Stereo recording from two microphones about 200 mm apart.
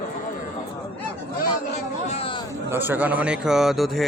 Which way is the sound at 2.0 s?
30° left (ahead or behind).